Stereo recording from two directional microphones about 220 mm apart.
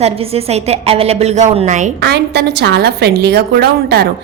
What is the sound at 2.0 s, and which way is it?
A woman's voice, 50° right (ahead or behind).